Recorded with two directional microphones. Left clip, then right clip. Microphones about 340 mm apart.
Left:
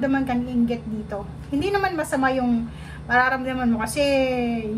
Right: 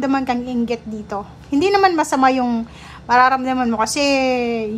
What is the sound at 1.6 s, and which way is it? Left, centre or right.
A woman's voice, centre.